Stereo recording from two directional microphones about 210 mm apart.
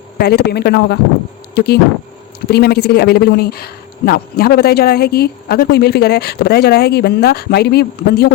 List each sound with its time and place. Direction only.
0.2 s speech: 50° left (ahead or behind)